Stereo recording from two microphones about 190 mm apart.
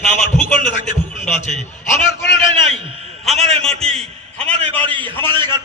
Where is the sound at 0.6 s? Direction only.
40° left (ahead or behind).